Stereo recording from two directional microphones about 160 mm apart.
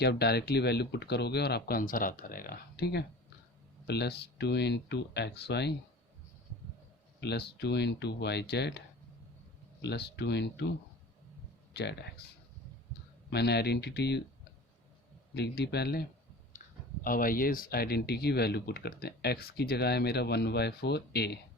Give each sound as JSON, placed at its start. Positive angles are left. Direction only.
{"t": 0.0, "sound": "speech", "side_deg": 90}
{"t": 7.2, "sound": "speech", "side_deg": 90}
{"t": 9.8, "sound": "speech", "side_deg": 90}
{"t": 11.7, "sound": "speech", "side_deg": 90}
{"t": 15.4, "sound": "speech", "side_deg": 90}
{"t": 17.0, "sound": "speech", "side_deg": 60}